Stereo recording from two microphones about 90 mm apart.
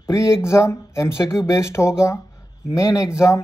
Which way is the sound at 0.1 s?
35° left (ahead or behind).